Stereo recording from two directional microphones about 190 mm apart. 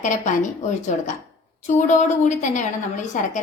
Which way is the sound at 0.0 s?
40° left (ahead or behind).